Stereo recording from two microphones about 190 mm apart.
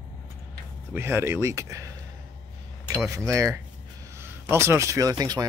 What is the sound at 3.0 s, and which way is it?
Speech, 15° right (ahead or behind).